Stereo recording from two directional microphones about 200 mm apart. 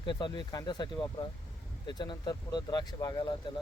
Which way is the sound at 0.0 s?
25° left (ahead or behind).